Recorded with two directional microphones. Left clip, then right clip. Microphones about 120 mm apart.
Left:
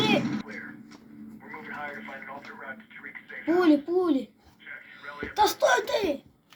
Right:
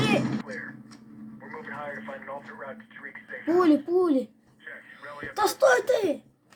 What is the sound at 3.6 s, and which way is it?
Speech, 65° right (ahead or behind).